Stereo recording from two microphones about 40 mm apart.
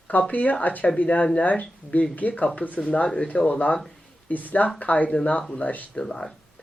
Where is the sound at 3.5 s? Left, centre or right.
Left.